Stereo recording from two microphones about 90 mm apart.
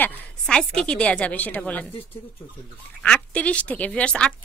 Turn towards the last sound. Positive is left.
turn(degrees=10)  # may be behind; listen again after turning